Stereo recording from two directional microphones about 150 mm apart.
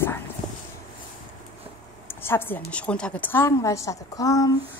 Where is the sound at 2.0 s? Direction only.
15° left (ahead or behind).